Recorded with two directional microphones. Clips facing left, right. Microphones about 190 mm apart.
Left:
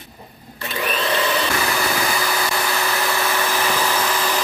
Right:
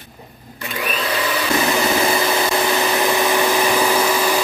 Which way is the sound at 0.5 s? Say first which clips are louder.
Even; 10° right (ahead or behind).